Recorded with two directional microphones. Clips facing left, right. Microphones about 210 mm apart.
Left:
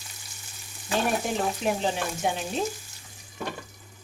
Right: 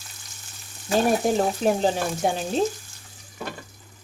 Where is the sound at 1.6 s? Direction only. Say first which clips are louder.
Right 5 dB; 40° right (ahead or behind).